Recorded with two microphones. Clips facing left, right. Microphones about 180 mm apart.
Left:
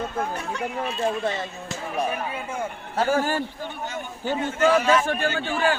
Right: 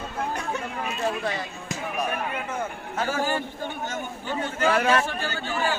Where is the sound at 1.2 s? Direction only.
25° left (ahead or behind).